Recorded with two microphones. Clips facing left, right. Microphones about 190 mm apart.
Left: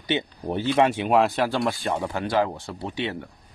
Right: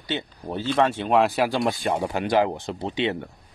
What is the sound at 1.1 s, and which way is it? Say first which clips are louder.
A man's voice: even; centre (ahead or behind).